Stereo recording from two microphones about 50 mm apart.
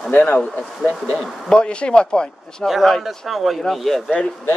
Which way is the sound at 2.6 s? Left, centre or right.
Centre.